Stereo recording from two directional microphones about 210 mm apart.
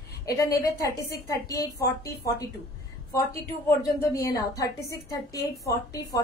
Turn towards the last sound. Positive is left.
turn(degrees=15)  # may be behind; listen again after turning